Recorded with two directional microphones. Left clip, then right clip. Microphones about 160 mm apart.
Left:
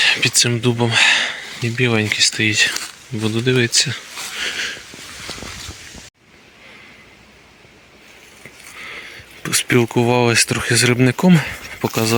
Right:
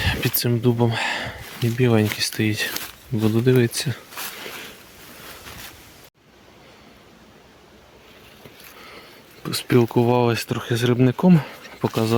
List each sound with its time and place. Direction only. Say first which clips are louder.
0.0 s a sound: left 10 dB; 35° right (ahead or behind)
0.3 s speech: left 5 dB; 20° right (ahead or behind)
2.7 s speech: left 3 dB; centre (ahead or behind)
3.4 s speech: left 6 dB; 25° right (ahead or behind)
4.2 s a sound: left 12 dB; 5° left (ahead or behind)
8.9 s speech: left 9 dB; 5° right (ahead or behind)